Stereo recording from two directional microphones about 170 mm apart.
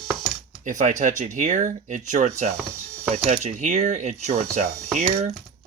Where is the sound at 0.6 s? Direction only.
45° right (ahead or behind).